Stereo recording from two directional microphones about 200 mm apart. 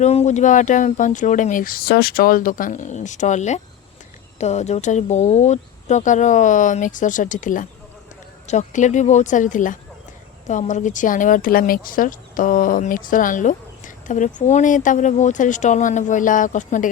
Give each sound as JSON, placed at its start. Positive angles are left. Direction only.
{"t": 0.0, "sound": "speech", "side_deg": 35}